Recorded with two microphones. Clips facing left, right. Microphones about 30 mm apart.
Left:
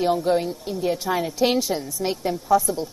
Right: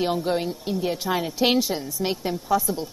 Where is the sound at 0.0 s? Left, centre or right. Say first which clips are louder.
Left 3 dB; centre.